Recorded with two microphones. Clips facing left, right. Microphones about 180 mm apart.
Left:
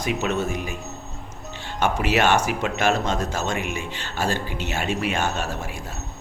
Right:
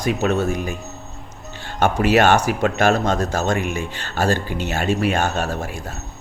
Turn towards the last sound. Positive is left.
turn(degrees=-45)  # may be behind; listen again after turning